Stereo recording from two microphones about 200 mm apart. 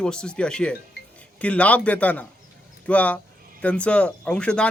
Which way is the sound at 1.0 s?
50° left (ahead or behind).